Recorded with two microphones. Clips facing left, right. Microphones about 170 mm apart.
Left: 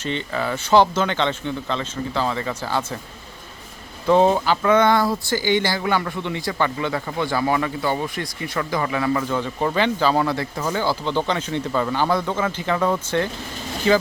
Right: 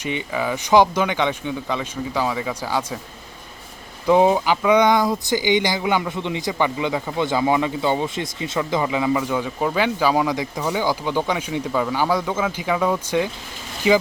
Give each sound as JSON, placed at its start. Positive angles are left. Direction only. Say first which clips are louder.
{"t": 0.0, "sound": "speech", "louder": "right 1 dB", "side_deg": -10}
{"t": 4.0, "sound": "speech", "louder": "right 1 dB", "side_deg": -10}